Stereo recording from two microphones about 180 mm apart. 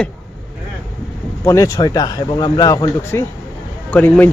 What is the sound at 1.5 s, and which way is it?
A man's voice, 15° left (ahead or behind).